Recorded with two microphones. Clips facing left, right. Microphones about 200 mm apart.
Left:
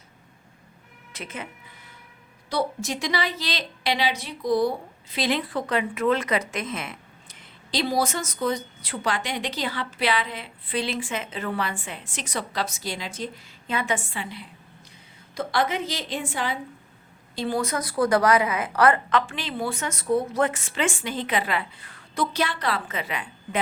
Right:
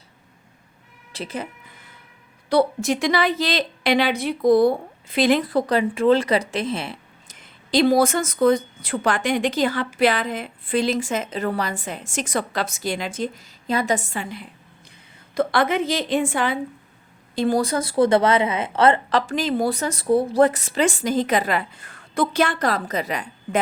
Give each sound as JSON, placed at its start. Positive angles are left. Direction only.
{"t": 1.1, "sound": "speech", "side_deg": -35}
{"t": 2.5, "sound": "speech", "side_deg": -60}
{"t": 7.3, "sound": "a woman's voice", "side_deg": -50}
{"t": 17.6, "sound": "a woman's voice", "side_deg": -30}
{"t": 19.2, "sound": "a woman's voice", "side_deg": -40}